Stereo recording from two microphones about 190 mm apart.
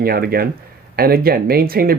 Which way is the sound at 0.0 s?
50° right (ahead or behind).